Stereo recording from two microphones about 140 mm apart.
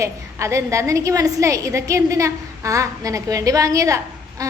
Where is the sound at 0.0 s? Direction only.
20° right (ahead or behind).